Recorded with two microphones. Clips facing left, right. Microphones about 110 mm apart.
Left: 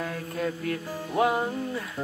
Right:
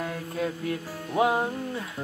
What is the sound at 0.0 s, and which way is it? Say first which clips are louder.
Music: even; 20° right (ahead or behind).